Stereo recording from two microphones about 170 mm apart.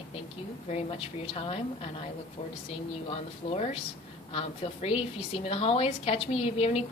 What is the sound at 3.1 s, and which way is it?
A woman's voice, 35° left (ahead or behind).